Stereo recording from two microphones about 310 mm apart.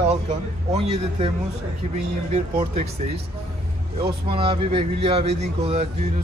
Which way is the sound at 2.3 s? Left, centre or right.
Right.